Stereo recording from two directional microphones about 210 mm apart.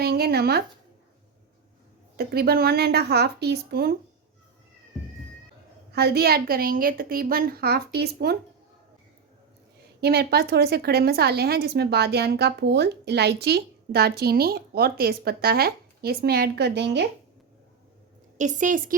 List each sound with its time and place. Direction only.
0.0 s a sound: 50° right (ahead or behind)
2.1 s a woman's voice: 45° right (ahead or behind)
5.9 s a woman's voice: 50° right (ahead or behind)
10.0 s a woman's voice: 50° right (ahead or behind)
18.3 s a woman's voice: 35° right (ahead or behind)